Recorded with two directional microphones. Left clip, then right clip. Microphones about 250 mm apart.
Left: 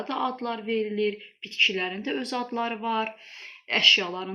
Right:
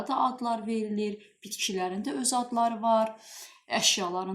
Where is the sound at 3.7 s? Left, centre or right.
Right.